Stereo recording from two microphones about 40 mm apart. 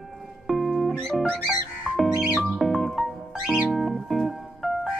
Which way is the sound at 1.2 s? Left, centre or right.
Centre.